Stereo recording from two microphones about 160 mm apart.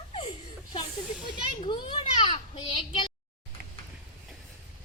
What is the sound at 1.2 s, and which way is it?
Children playing, 30° left (ahead or behind).